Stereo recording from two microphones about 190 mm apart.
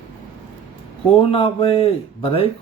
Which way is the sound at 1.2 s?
30° left (ahead or behind).